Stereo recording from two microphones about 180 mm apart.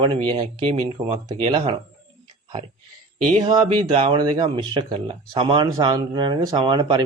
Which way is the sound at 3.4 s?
25° right (ahead or behind).